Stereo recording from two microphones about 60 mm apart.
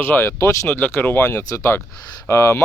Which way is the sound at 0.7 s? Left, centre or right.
Left.